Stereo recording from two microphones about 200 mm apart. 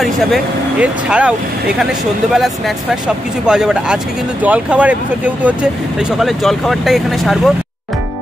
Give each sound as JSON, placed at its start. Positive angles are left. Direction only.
{"t": 0.0, "sound": "speech", "side_deg": -5}
{"t": 2.3, "sound": "speech", "side_deg": 0}